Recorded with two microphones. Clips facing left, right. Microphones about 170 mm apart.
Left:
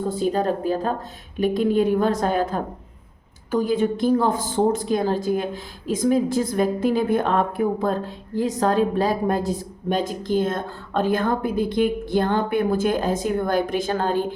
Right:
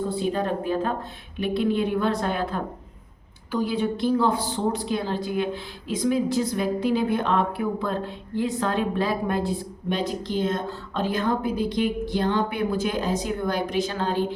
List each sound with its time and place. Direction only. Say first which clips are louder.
0.1 s a woman's voice: left 3 dB; 40° left (ahead or behind)